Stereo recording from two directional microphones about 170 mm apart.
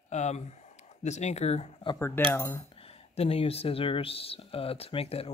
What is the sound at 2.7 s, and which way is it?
Speech, 35° left (ahead or behind).